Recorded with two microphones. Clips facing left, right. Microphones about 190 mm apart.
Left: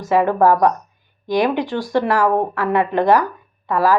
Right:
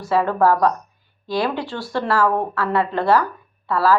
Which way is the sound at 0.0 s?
15° left (ahead or behind).